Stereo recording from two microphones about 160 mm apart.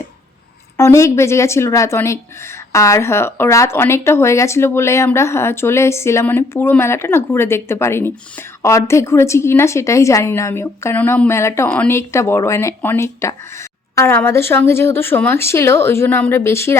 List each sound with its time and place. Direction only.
0.8 s speech: 20° left (ahead or behind)